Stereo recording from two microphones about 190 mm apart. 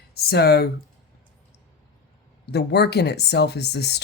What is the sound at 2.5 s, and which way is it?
Speech, 60° left (ahead or behind).